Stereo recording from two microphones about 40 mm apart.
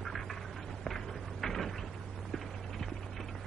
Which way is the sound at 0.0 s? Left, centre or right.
Centre.